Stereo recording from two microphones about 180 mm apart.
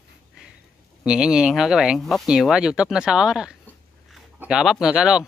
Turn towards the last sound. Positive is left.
turn(degrees=-5)  # may be behind; listen again after turning